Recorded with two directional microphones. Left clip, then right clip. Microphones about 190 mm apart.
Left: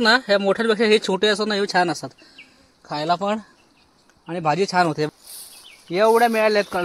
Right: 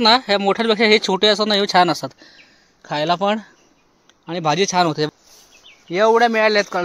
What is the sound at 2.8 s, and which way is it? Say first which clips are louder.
Speech: right 3 dB; 30° right (ahead or behind).